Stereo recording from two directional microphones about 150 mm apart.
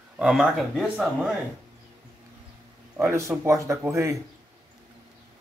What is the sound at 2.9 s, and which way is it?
Speech, 15° right (ahead or behind).